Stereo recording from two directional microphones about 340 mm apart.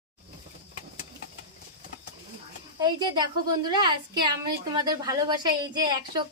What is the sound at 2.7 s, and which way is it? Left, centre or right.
A woman's voice, centre.